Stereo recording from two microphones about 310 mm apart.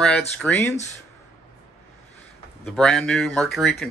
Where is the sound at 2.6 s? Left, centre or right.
Centre.